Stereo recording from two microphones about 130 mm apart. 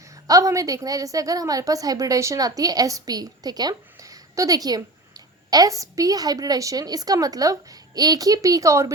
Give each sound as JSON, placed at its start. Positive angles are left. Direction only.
{"t": 0.3, "sound": "a woman's voice", "side_deg": -25}